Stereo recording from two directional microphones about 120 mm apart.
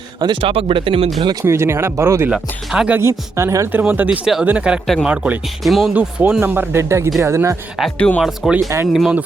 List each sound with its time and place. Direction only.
0.2 s speech: 45° right (ahead or behind)
1.2 s speech: 35° right (ahead or behind)
1.5 s speech: 20° right (ahead or behind)
2.3 s speech: 10° right (ahead or behind)
3.0 s speech: 20° right (ahead or behind); by 5.9 s centre (ahead or behind)
5.9 s speech: 10° right (ahead or behind)
7.9 s speech: 10° left (ahead or behind)
8.2 s speech: 10° right (ahead or behind)